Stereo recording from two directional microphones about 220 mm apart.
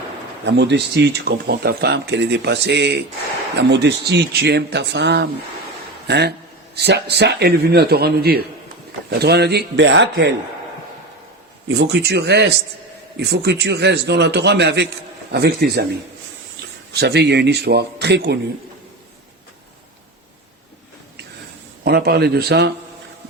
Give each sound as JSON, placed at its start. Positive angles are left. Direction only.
{"t": 0.4, "sound": "speech", "side_deg": -50}
{"t": 11.8, "sound": "speech", "side_deg": -50}
{"t": 16.9, "sound": "speech", "side_deg": -50}
{"t": 21.8, "sound": "speech", "side_deg": -45}